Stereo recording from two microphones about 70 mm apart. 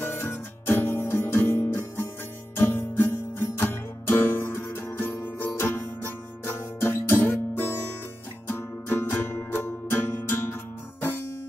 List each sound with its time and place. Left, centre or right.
0.0 s music: left